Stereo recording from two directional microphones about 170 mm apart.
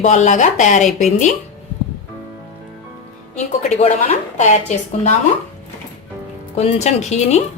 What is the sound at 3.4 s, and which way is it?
A woman's voice, 40° left (ahead or behind).